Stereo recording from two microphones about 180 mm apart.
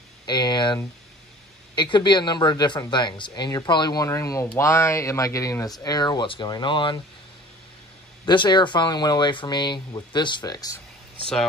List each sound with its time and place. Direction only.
0.3 s speech: 25° left (ahead or behind)
8.3 s speech: 25° left (ahead or behind)